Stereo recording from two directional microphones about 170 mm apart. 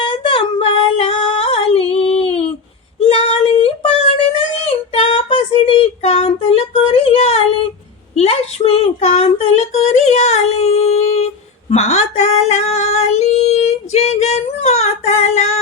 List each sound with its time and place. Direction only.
0.0 s female singing: 30° left (ahead or behind)
3.0 s child singing: 35° left (ahead or behind)
11.7 s female singing: 40° left (ahead or behind)